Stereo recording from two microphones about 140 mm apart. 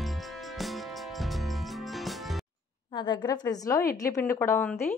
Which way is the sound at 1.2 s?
Centre (ahead or behind).